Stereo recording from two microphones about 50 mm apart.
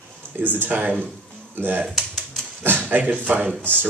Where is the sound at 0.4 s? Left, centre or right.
Right.